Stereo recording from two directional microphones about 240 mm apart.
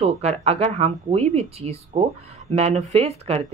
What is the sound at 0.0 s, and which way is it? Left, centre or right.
A woman's voice, right.